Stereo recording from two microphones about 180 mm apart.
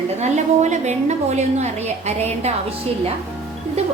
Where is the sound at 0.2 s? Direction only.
40° right (ahead or behind).